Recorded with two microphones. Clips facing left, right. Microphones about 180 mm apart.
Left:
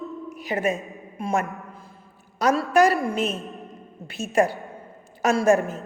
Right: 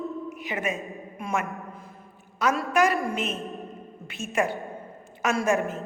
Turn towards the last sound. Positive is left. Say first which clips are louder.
# left 5 dB
turn(degrees=40)  # may be behind; listen again after turning